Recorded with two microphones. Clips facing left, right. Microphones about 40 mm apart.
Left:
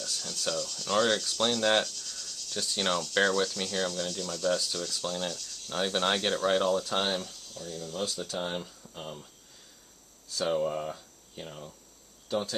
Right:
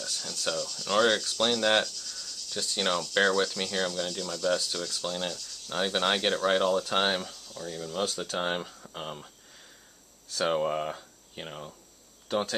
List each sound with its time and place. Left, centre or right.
0.2 s speech: centre
0.7 s speech: right
3.2 s speech: right
7.7 s speech: right
12.3 s speech: right